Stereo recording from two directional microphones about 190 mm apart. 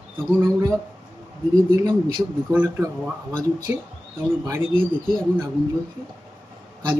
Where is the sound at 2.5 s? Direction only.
10° right (ahead or behind).